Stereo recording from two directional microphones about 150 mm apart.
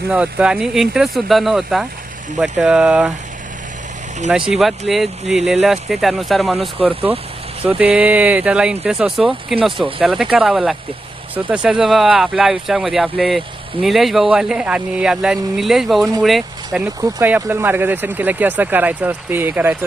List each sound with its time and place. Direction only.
0.1 s speech: 10° right (ahead or behind)
4.3 s speech: 5° right (ahead or behind)
6.7 s speech: 10° right (ahead or behind)
17.0 s speech: 15° right (ahead or behind)